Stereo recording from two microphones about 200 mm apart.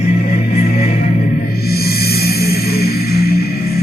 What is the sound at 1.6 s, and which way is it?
Music, 50° left (ahead or behind).